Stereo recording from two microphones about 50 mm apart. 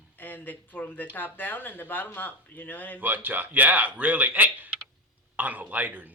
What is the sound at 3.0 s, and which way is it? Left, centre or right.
A man's voice, right.